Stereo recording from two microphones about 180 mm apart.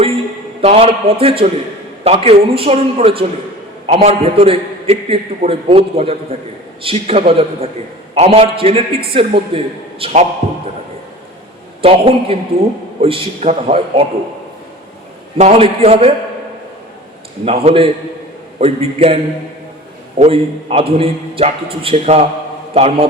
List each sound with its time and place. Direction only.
0.6 s a man's voice: 35° right (ahead or behind)
11.8 s a man's voice: 30° right (ahead or behind)
15.4 s a man's voice: 35° right (ahead or behind)
17.4 s a man's voice: 35° right (ahead or behind)